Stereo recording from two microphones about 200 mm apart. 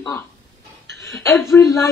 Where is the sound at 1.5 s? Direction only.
10° left (ahead or behind).